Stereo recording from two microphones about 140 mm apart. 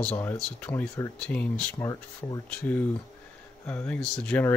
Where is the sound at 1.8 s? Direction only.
25° left (ahead or behind).